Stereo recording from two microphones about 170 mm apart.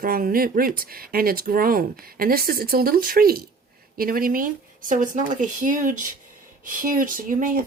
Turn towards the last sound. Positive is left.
turn(degrees=-50)  # may be behind; listen again after turning